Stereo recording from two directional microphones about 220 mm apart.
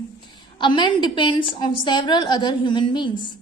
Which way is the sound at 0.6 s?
20° left (ahead or behind).